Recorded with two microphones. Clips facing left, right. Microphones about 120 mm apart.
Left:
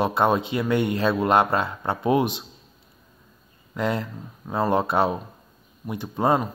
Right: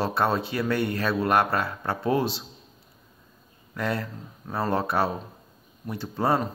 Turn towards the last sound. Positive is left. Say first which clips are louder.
# left 3 dB
turn(degrees=20)  # may be behind; listen again after turning